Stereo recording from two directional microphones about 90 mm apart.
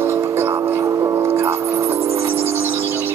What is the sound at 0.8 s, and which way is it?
Music, 40° right (ahead or behind).